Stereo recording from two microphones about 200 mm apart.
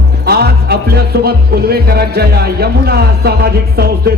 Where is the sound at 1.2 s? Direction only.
50° right (ahead or behind).